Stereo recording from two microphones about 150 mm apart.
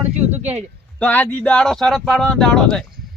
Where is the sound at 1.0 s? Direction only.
10° left (ahead or behind).